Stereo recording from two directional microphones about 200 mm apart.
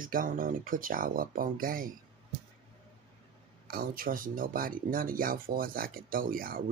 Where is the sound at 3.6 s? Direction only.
45° right (ahead or behind).